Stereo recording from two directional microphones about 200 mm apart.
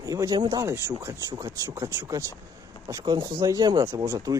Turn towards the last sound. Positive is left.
turn(degrees=-15)  # may be behind; listen again after turning